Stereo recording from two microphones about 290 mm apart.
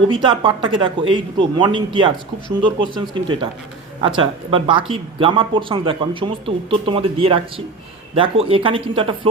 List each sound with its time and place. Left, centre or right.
0.1 s speech: centre